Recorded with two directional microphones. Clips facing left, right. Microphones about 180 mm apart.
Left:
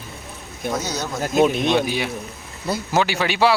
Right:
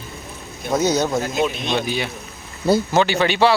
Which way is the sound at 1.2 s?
50° left (ahead or behind).